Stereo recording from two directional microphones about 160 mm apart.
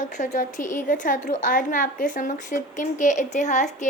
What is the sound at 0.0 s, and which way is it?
A woman's voice, 50° left (ahead or behind).